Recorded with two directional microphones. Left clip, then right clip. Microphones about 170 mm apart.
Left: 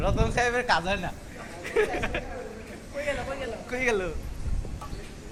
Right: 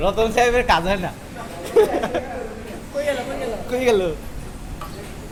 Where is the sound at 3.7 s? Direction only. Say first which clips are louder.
Right 9 dB; 15° right (ahead or behind).